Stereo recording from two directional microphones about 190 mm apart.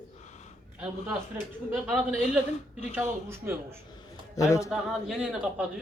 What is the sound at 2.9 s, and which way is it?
Speech, 10° right (ahead or behind).